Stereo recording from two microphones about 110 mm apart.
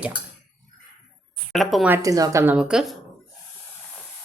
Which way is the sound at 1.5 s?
Centre (ahead or behind).